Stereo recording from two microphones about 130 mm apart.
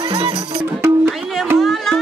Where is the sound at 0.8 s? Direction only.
20° right (ahead or behind).